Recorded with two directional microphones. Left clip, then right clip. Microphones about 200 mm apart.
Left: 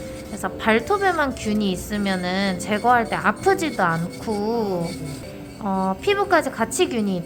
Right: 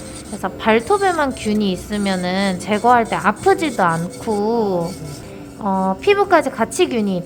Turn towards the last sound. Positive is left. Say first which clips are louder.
# right 4 dB
turn(degrees=-15)  # may be behind; listen again after turning